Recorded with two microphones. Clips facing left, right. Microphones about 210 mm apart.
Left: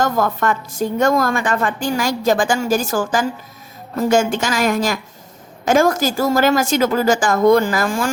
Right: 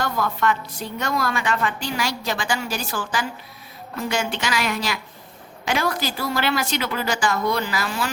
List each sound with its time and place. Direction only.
0.0 s a woman's voice: 45° left (ahead or behind)